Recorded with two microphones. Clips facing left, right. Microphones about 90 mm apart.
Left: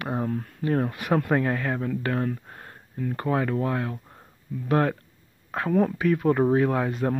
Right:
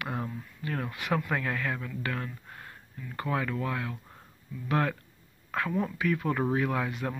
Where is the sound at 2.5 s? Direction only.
35° left (ahead or behind).